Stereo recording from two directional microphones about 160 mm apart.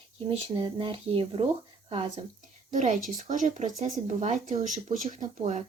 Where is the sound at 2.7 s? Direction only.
50° right (ahead or behind).